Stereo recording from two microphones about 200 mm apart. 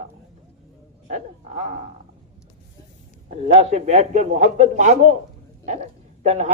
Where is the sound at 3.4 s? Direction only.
30° right (ahead or behind).